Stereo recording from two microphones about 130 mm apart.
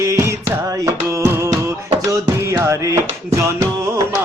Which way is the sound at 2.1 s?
25° right (ahead or behind).